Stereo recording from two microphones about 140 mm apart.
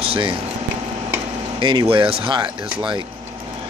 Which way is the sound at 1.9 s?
35° right (ahead or behind).